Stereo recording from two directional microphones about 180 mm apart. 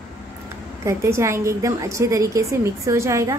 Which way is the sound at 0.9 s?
15° right (ahead or behind).